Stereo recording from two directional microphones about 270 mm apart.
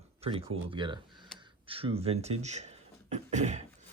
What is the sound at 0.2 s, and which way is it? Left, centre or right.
Speech, right.